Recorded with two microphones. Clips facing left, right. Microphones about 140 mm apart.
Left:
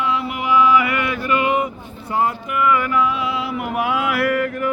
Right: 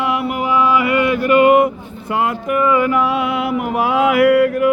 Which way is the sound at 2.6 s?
30° right (ahead or behind).